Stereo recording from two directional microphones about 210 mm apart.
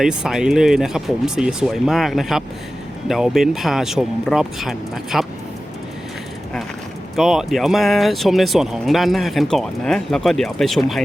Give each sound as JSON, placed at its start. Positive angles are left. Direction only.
{"t": 0.0, "sound": "speech", "side_deg": -5}
{"t": 7.2, "sound": "speech", "side_deg": 0}